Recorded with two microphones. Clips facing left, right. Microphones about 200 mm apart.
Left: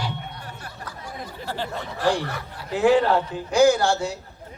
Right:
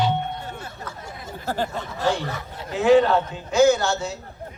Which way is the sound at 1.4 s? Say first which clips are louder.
Right 5 dB; 45° right (ahead or behind).